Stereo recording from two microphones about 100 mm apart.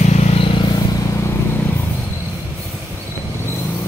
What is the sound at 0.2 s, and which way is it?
Vehicle, 80° left.